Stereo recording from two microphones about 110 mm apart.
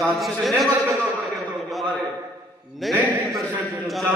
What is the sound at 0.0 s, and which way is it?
Speech, centre (ahead or behind).